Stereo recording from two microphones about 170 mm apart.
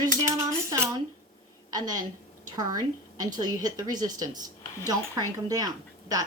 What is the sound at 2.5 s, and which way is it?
A woman's voice, 20° right (ahead or behind).